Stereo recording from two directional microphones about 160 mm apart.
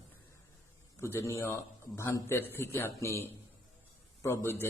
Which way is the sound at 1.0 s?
20° left (ahead or behind).